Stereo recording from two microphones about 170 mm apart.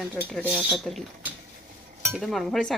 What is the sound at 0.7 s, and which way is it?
Speech, centre (ahead or behind).